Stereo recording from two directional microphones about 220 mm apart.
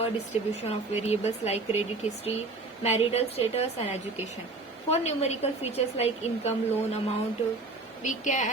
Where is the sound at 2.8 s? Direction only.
30° left (ahead or behind).